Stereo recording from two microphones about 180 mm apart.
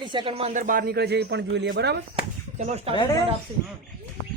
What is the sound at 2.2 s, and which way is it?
Chop, 35° right (ahead or behind).